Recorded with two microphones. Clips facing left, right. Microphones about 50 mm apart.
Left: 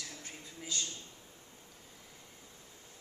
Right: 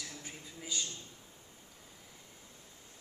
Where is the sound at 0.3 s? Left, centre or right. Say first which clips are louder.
Left 1 dB; centre.